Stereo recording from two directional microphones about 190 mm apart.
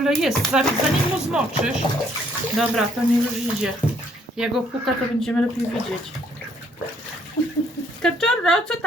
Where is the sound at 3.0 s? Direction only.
5° right (ahead or behind).